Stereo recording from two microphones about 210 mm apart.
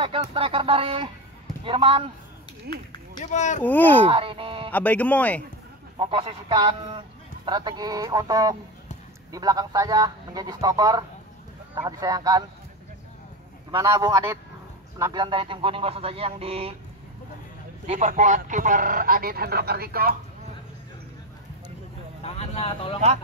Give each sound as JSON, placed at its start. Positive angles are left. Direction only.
{"t": 0.0, "sound": "a man's voice", "side_deg": -25}
{"t": 2.7, "sound": "speech", "side_deg": -50}
{"t": 3.2, "sound": "speech", "side_deg": 35}
{"t": 3.6, "sound": "speech", "side_deg": 10}
{"t": 4.1, "sound": "a man's voice", "side_deg": -25}
{"t": 4.6, "sound": "speech", "side_deg": 5}
{"t": 5.9, "sound": "a man's voice", "side_deg": -25}
{"t": 13.7, "sound": "a man's voice", "side_deg": -15}
{"t": 17.8, "sound": "speech", "side_deg": -35}
{"t": 22.2, "sound": "speech", "side_deg": 30}